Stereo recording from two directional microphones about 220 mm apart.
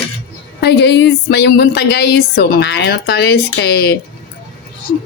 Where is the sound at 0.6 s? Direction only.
50° left (ahead or behind).